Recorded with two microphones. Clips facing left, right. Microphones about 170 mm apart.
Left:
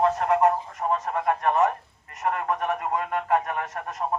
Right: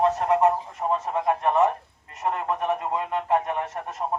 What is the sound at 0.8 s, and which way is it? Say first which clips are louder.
Speech: even; 5° right (ahead or behind).